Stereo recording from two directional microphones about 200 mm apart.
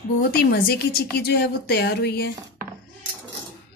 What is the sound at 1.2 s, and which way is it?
Speech, 55° left (ahead or behind).